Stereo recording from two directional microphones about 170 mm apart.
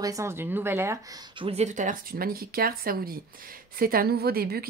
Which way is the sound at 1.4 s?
40° right (ahead or behind).